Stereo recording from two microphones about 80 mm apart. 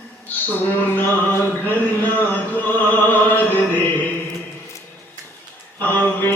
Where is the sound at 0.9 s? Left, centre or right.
Left.